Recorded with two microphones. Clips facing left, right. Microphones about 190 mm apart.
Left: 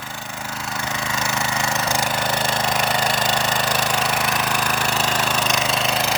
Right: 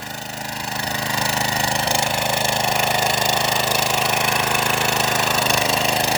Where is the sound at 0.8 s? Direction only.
35° right (ahead or behind).